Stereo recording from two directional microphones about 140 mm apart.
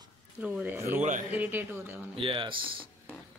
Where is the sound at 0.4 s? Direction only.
10° right (ahead or behind).